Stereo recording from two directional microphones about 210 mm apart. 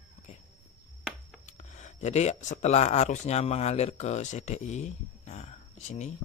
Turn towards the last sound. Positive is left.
turn(degrees=35)  # may be behind; listen again after turning